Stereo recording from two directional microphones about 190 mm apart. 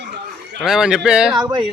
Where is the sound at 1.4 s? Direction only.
25° right (ahead or behind).